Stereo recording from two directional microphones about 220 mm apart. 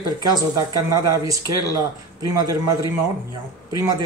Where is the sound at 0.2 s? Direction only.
20° right (ahead or behind).